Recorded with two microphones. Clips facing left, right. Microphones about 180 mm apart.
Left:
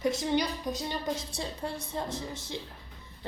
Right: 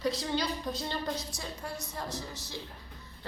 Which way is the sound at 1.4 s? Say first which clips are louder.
Left 4 dB; 30° left (ahead or behind).